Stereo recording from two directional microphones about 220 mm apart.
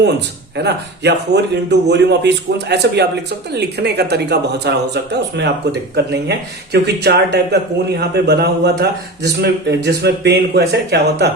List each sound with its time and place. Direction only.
0.5 s a man's voice: 50° right (ahead or behind)
6.8 s a man's voice: 50° right (ahead or behind)